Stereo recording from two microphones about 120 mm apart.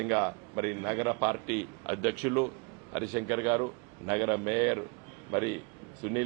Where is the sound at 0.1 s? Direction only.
20° right (ahead or behind).